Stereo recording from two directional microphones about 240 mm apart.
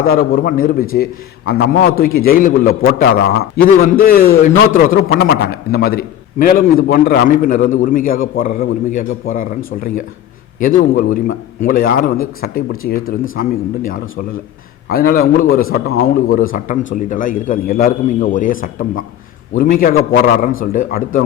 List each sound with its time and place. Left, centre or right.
0.0 s a man's voice: left